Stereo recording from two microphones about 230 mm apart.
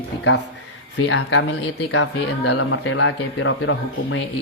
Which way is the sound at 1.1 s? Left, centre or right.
Left.